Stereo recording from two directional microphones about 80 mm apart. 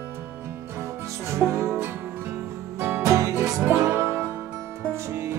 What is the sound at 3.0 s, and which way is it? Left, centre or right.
Music, right.